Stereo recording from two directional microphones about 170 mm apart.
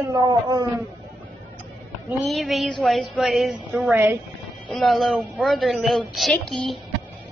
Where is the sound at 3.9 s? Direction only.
10° right (ahead or behind).